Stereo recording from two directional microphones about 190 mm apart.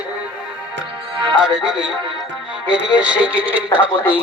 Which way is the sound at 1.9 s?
25° right (ahead or behind).